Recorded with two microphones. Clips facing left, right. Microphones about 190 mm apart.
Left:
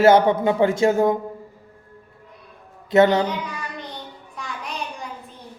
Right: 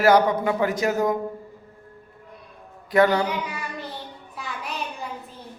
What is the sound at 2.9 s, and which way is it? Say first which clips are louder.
Speech: left 3 dB; 25° left (ahead or behind).